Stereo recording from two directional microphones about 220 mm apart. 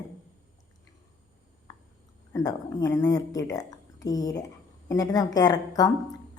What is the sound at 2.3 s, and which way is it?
A woman's voice, 15° left (ahead or behind).